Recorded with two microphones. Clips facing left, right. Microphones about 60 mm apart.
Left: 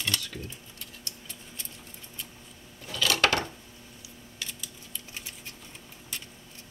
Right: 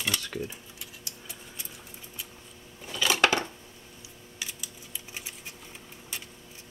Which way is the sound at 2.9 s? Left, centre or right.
Centre.